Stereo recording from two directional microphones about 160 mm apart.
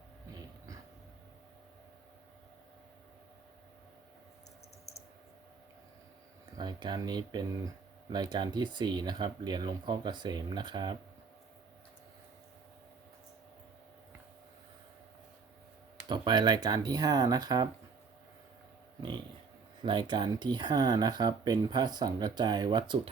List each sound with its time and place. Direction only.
6.6 s speech: 25° right (ahead or behind)
16.0 s speech: 30° right (ahead or behind)
19.8 s speech: 30° right (ahead or behind)